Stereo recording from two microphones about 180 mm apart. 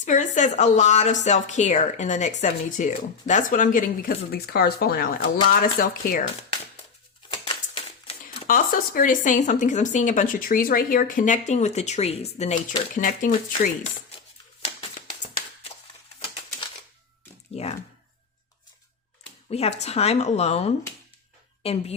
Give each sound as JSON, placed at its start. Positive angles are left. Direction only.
{"t": 0.0, "sound": "speech", "side_deg": 45}
{"t": 7.4, "sound": "a sound", "side_deg": 30}
{"t": 8.4, "sound": "speech", "side_deg": 50}
{"t": 14.6, "sound": "tap", "side_deg": 35}
{"t": 17.5, "sound": "a sound", "side_deg": 35}
{"t": 19.5, "sound": "speech", "side_deg": 35}